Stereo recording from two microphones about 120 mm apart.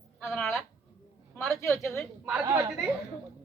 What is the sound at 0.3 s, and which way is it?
Speech, 5° left (ahead or behind).